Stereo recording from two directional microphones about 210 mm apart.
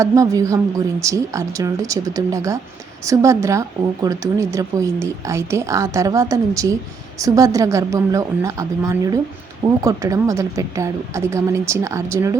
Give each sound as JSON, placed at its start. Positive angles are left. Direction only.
{"t": 0.0, "sound": "speech", "side_deg": -15}